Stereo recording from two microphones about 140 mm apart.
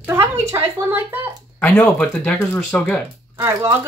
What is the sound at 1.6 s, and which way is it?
Speech, 10° left (ahead or behind).